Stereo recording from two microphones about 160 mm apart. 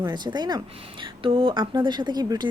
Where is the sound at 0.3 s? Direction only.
25° right (ahead or behind).